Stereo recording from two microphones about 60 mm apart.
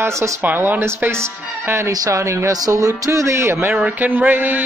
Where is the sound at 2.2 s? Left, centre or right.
Right.